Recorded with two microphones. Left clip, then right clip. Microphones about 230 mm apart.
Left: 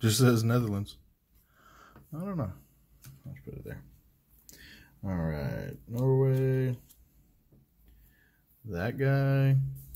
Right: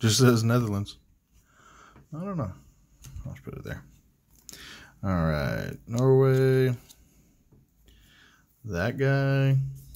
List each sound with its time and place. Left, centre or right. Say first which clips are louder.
0.0 s a man's voice: right 4 dB; centre
1.5 s a sound: right 3 dB; centre
3.3 s speech: right 5 dB; centre
8.2 s speech: right 5 dB; centre